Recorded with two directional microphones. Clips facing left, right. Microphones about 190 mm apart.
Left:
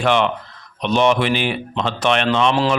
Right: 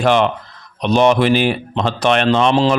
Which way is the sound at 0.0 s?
40° right (ahead or behind).